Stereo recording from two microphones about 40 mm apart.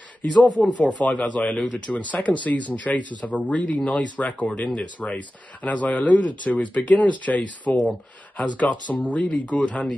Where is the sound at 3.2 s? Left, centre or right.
Left.